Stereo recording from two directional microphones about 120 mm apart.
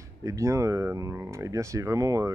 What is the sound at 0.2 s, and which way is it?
Speech, 25° right (ahead or behind).